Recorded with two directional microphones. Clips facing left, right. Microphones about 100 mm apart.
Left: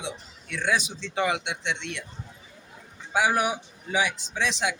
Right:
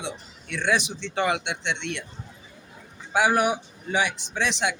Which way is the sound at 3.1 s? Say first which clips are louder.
Right 3 dB; 60° right (ahead or behind).